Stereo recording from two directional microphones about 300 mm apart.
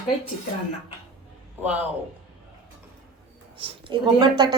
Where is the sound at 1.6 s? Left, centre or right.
Centre.